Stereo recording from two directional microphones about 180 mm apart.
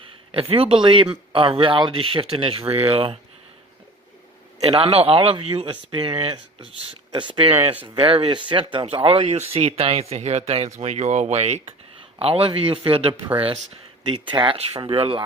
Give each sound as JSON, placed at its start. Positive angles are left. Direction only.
{"t": 0.3, "sound": "speech", "side_deg": -30}
{"t": 4.6, "sound": "speech", "side_deg": -35}